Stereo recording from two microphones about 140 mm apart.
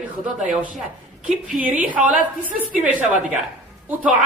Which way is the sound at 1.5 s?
75° right (ahead or behind).